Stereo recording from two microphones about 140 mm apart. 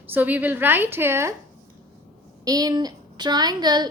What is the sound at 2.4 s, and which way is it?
A woman's voice, 25° right (ahead or behind).